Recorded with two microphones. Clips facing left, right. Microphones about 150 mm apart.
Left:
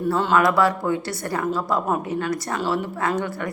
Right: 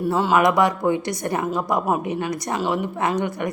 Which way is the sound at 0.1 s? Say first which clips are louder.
Right 1 dB; 15° right (ahead or behind).